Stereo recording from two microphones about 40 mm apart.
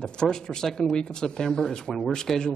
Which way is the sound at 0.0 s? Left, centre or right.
Centre.